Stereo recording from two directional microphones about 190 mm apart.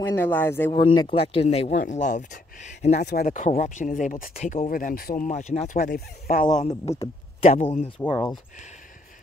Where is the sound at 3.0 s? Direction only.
50° left (ahead or behind).